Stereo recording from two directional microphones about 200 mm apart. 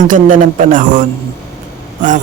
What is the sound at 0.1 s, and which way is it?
Speech, 40° right (ahead or behind).